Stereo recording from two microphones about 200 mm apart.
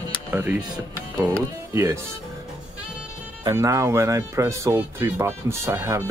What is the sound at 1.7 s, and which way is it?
Speech, 15° right (ahead or behind).